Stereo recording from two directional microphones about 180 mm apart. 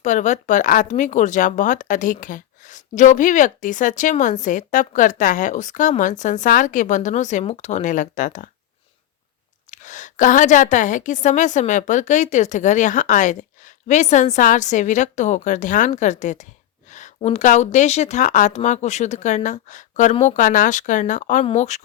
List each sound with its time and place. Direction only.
0.0 s speech: 40° left (ahead or behind)
9.7 s speech: 45° left (ahead or behind)